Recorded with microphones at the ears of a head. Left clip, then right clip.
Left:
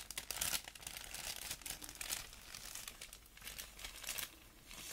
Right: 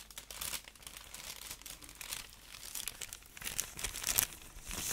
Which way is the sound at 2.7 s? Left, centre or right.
Right.